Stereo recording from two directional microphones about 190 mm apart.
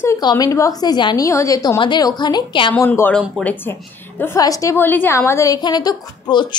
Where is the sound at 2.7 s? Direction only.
10° left (ahead or behind).